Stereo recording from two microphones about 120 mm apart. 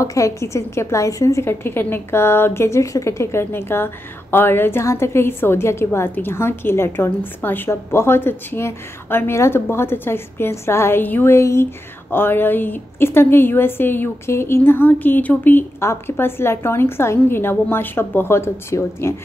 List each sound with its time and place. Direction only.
0.0 s a woman's voice: 25° left (ahead or behind)